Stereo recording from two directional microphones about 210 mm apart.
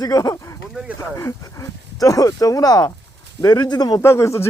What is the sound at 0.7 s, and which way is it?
Speech, 5° right (ahead or behind).